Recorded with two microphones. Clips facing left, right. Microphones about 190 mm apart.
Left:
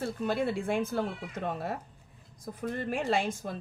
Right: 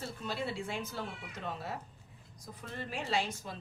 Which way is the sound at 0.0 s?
55° left (ahead or behind).